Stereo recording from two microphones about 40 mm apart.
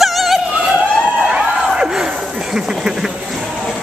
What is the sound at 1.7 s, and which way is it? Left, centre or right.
Battle cry, centre.